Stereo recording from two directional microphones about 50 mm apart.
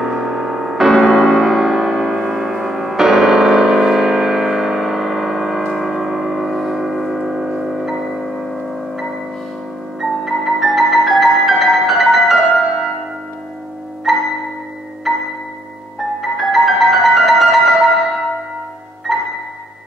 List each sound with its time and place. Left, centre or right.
0.0 s music: centre
2.2 s music: centre
7.9 s music: centre
9.9 s music: centre
14.1 s music: centre
16.2 s music: centre
19.1 s music: centre